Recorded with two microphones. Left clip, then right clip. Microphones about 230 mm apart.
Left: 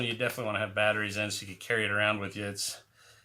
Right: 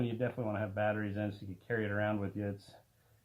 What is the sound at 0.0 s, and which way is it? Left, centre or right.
Speech, left.